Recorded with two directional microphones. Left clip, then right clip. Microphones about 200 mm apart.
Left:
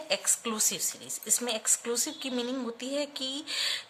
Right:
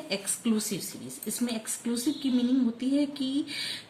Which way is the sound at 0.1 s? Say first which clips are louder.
Left 1 dB; 40° left (ahead or behind).